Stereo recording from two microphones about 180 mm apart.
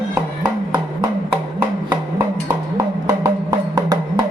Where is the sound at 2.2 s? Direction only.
15° right (ahead or behind).